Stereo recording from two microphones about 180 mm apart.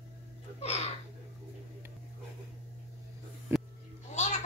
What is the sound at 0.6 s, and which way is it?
Speech, 35° left (ahead or behind).